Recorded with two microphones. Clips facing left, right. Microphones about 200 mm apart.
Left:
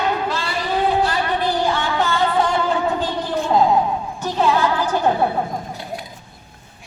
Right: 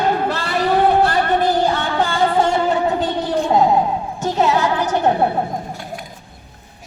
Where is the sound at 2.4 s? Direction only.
20° right (ahead or behind).